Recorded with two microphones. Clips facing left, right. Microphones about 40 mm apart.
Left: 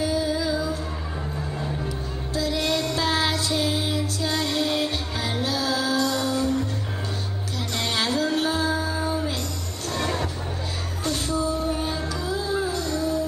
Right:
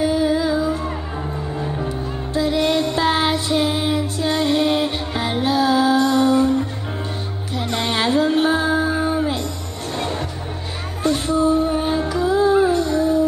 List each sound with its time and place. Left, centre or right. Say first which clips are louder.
0.0 s music: right 6 dB; right
1.8 s music: right 6 dB; right
7.5 s music: right 6 dB; right